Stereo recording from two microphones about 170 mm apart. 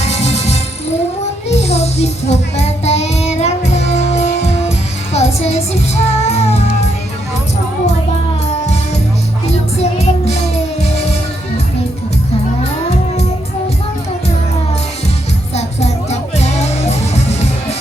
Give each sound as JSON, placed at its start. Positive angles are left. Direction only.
{"t": 0.0, "sound": "music", "side_deg": 40}
{"t": 9.5, "sound": "music", "side_deg": 40}
{"t": 15.5, "sound": "music", "side_deg": 40}